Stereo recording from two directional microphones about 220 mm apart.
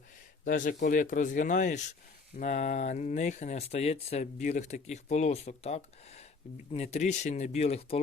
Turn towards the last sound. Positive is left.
turn(degrees=30)  # may be behind; listen again after turning